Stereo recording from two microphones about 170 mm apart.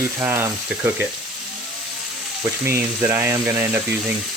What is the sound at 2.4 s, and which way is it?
Speech, 15° right (ahead or behind).